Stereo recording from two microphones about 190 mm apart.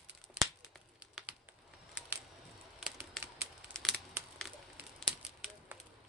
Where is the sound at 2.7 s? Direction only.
Centre (ahead or behind).